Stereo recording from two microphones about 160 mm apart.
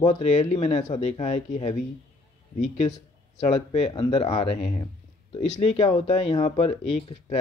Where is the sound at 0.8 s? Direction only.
50° left (ahead or behind).